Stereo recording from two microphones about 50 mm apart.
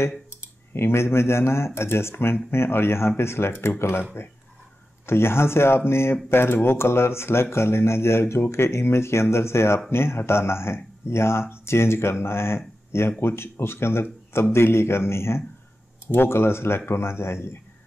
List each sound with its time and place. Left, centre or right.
0.7 s speech: left